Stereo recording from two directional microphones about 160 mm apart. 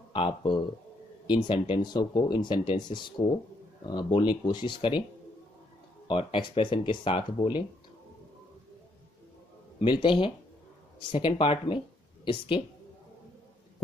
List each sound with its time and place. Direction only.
0.1 s speech: 35° left (ahead or behind)
6.0 s speech: 30° left (ahead or behind)
10.0 s speech: 35° left (ahead or behind)